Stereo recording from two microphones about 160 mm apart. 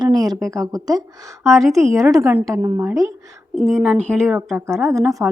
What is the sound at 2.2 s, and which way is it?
Speech, 15° right (ahead or behind).